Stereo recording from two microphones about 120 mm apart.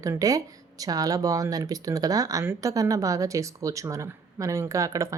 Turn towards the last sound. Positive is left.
turn(degrees=-25)  # may be behind; listen again after turning